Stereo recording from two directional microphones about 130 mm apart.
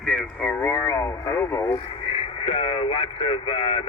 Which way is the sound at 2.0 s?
45° left (ahead or behind).